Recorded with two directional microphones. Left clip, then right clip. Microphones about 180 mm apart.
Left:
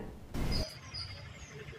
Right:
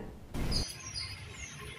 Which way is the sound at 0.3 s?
Centre (ahead or behind).